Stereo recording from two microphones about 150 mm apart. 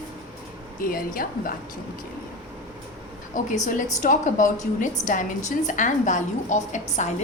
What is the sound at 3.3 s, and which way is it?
A woman's voice, 55° left (ahead or behind).